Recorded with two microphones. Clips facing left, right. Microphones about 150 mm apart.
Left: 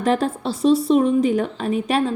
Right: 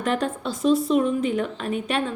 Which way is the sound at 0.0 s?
35° left (ahead or behind).